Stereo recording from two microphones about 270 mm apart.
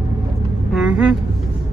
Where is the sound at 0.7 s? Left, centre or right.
Centre.